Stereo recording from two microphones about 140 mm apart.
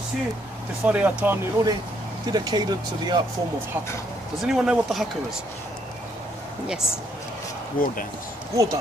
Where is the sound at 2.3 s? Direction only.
30° right (ahead or behind).